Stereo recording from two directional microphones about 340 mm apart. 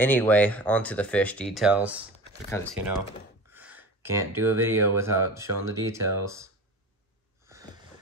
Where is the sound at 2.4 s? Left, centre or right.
Centre.